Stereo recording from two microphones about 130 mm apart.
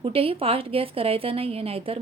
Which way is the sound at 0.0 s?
45° right (ahead or behind).